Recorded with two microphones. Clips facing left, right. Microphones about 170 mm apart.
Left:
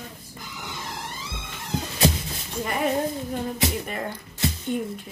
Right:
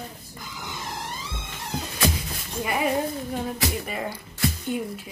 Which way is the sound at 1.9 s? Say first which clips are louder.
Left 3 dB; 25° left (ahead or behind).